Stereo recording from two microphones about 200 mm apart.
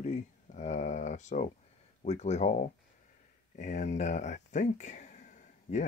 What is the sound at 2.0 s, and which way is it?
Speech, 35° left (ahead or behind).